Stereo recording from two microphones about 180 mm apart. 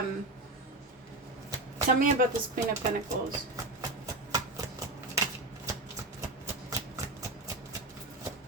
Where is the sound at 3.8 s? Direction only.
20° right (ahead or behind).